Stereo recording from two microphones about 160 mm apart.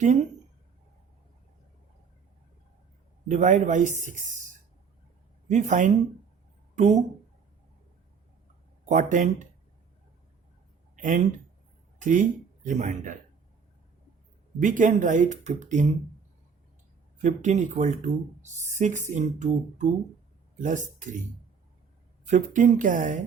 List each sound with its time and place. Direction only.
3.2 s speech: 55° right (ahead or behind)
8.9 s speech: 50° right (ahead or behind)
10.9 s speech: 55° right (ahead or behind)
14.6 s speech: 55° right (ahead or behind)
17.2 s speech: 50° right (ahead or behind)
22.3 s speech: 55° right (ahead or behind)